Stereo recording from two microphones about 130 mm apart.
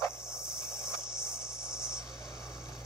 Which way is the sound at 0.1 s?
5° right (ahead or behind).